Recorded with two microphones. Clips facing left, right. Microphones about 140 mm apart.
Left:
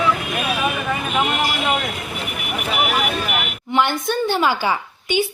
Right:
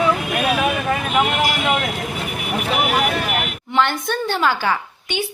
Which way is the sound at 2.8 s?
40° right (ahead or behind).